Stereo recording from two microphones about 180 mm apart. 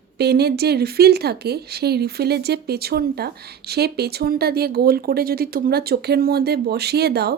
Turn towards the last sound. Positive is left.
turn(degrees=-65)  # may be behind; listen again after turning